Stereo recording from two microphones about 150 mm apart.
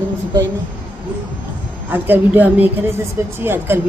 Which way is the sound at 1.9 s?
10° right (ahead or behind).